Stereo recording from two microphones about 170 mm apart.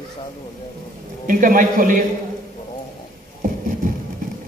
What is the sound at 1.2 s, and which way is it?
Speech, 55° right (ahead or behind).